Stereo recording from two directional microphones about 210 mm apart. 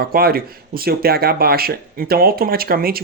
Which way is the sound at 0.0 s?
45° right (ahead or behind).